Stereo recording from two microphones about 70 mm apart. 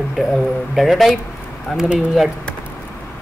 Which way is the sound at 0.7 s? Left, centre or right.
Centre.